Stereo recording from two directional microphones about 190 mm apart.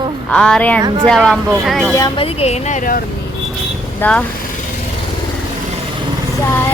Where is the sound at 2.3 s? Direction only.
35° left (ahead or behind).